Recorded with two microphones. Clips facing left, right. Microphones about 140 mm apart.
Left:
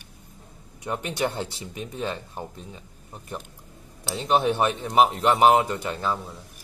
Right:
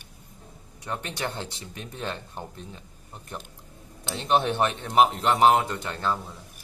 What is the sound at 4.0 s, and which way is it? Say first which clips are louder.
Speech: left 1 dB; 10° left (ahead or behind).